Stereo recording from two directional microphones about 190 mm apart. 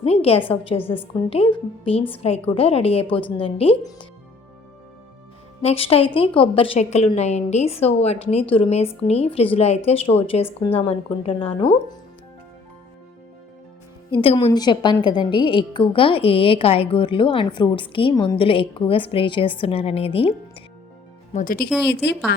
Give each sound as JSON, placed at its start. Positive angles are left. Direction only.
{"t": 0.0, "sound": "a woman's voice", "side_deg": 30}
{"t": 5.6, "sound": "a woman's voice", "side_deg": 30}
{"t": 14.1, "sound": "a woman's voice", "side_deg": 25}
{"t": 21.3, "sound": "speech", "side_deg": 50}
{"t": 22.3, "sound": "speech", "side_deg": 65}